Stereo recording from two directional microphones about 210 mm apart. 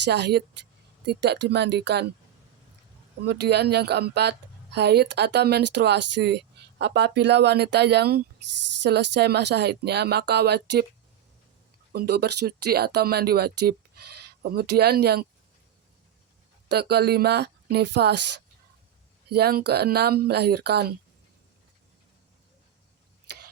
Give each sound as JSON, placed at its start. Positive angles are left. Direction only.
{"t": 0.0, "sound": "speech", "side_deg": -55}
{"t": 3.2, "sound": "speech", "side_deg": -50}
{"t": 11.9, "sound": "speech", "side_deg": -50}
{"t": 16.6, "sound": "speech", "side_deg": -50}
{"t": 19.3, "sound": "speech", "side_deg": -50}